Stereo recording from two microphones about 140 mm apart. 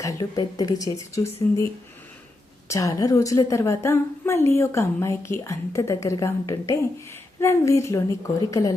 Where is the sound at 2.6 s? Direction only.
25° left (ahead or behind).